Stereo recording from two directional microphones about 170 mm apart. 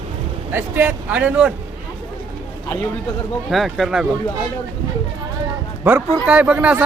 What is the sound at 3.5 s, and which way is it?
Speech, centre (ahead or behind).